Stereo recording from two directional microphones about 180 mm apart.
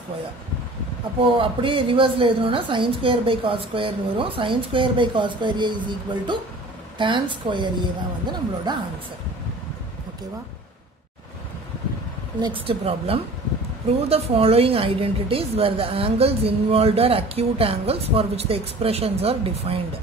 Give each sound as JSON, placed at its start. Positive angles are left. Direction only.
{"t": 1.2, "sound": "a woman's voice", "side_deg": -30}
{"t": 12.4, "sound": "a woman's voice", "side_deg": -25}